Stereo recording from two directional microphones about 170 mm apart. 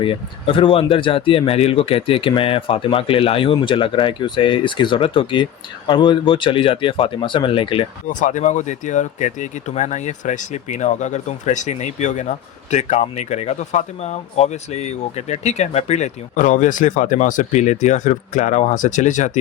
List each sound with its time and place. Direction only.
0.0 s speech: 30° left (ahead or behind)
8.0 s speech: 50° left (ahead or behind)